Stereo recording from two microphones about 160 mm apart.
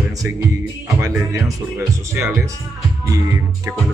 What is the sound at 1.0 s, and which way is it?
Speech, 15° right (ahead or behind).